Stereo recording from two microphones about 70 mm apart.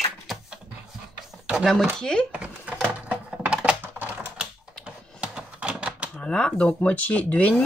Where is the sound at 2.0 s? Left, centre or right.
Centre.